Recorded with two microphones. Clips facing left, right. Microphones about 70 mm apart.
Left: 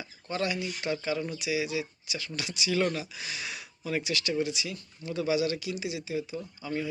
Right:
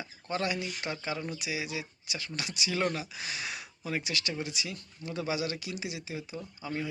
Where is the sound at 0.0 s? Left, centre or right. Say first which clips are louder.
Left 1 dB; right.